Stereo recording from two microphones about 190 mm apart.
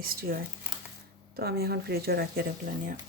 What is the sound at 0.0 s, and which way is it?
Speech, 50° right (ahead or behind).